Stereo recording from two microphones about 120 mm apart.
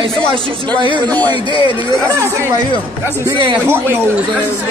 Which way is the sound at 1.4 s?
45° left (ahead or behind).